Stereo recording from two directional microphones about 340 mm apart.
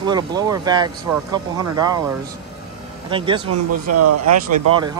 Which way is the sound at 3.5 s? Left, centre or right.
Right.